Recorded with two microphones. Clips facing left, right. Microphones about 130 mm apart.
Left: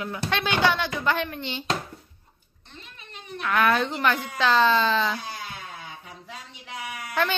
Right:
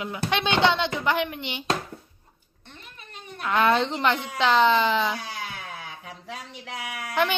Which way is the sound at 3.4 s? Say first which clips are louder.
Right 1 dB; 25° right (ahead or behind).